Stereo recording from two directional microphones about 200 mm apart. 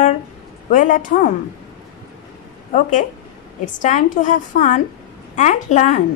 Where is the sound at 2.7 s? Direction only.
40° left (ahead or behind).